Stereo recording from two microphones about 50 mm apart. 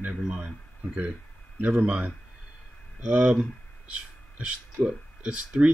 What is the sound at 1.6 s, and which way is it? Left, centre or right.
Speech, right.